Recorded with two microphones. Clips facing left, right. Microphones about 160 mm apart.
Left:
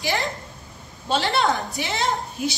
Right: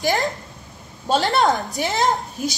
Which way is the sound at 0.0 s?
45° right (ahead or behind).